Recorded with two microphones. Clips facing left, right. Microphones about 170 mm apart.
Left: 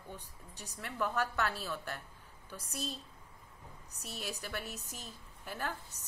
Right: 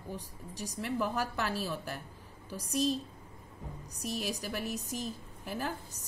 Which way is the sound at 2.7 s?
90° right.